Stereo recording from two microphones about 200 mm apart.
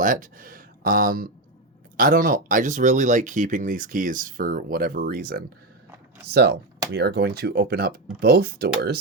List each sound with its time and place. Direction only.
0.0 s speech: 40° right (ahead or behind)